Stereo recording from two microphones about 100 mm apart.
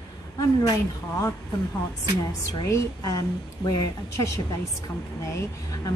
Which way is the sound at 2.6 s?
35° left (ahead or behind).